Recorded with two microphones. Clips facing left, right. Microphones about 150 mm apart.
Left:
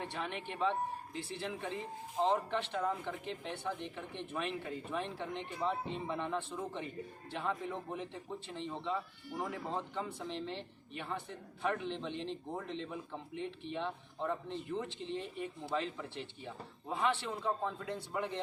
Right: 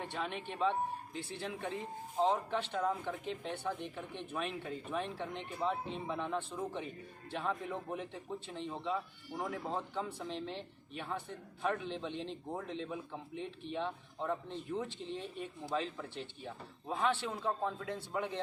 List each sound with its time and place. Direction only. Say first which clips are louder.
0.1 s a man's voice: right 1 dB; centre (ahead or behind)